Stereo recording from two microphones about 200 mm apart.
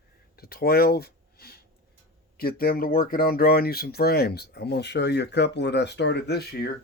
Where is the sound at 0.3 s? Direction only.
50° left (ahead or behind).